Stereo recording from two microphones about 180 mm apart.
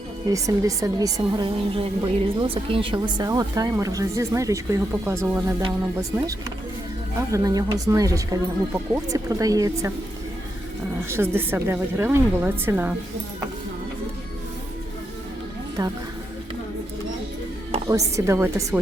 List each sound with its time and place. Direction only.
0.3 s a woman's voice: 20° right (ahead or behind)
7.3 s a woman's voice: 20° right (ahead or behind)
11.1 s speech: 15° right (ahead or behind)
15.8 s a woman's voice: 20° right (ahead or behind)
17.8 s speech: 15° right (ahead or behind)